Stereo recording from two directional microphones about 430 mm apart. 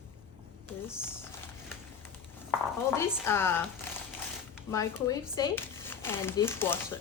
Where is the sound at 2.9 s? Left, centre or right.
Centre.